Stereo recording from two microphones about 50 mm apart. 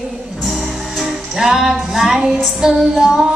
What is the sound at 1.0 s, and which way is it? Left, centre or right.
Music, centre.